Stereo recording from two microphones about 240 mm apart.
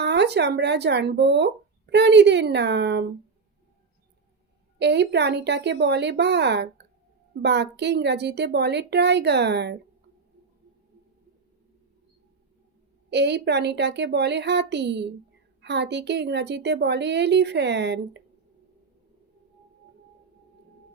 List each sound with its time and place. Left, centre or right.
0.0 s speech: right
4.8 s speech: right
13.1 s speech: right